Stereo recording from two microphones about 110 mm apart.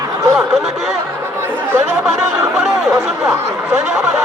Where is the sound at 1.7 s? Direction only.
20° right (ahead or behind).